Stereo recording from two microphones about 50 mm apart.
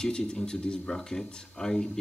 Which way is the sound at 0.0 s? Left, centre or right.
Centre.